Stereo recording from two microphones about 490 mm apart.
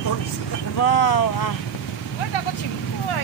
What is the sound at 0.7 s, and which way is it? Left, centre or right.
Speech, left.